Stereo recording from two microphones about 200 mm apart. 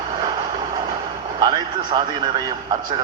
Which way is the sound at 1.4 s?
20° right (ahead or behind).